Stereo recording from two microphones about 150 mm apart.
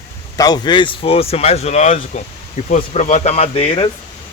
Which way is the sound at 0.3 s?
25° left (ahead or behind).